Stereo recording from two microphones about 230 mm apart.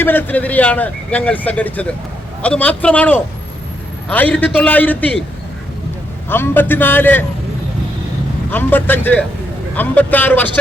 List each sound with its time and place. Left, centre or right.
0.0 s speech: centre
6.2 s speech: centre
8.4 s speech: centre